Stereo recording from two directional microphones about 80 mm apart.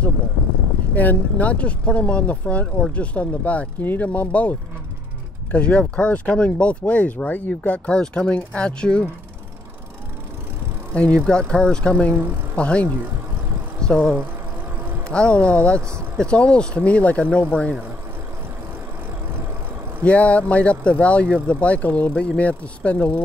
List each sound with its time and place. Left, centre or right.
0.9 s speech: centre
10.9 s speech: centre
20.0 s speech: centre